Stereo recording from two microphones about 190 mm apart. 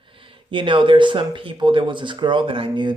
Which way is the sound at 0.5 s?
25° right (ahead or behind).